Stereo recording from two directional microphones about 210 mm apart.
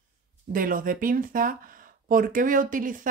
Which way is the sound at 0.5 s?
40° right (ahead or behind).